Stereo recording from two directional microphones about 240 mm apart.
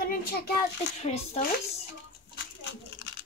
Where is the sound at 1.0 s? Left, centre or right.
Left.